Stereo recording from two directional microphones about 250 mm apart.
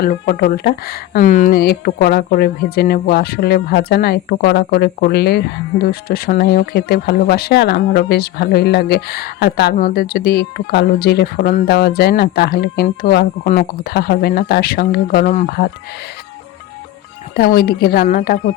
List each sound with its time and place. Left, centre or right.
0.0 s speech: left
17.3 s speech: left